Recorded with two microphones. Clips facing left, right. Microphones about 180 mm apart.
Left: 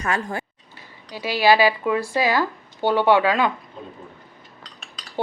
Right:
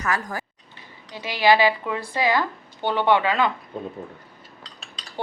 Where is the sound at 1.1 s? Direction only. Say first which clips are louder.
Left 1 dB; 20° right (ahead or behind).